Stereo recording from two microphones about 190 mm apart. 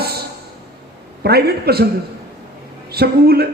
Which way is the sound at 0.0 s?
55° right (ahead or behind).